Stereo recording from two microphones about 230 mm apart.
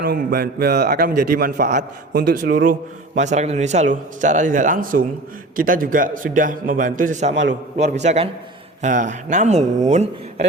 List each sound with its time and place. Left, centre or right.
0.0 s a man's voice: right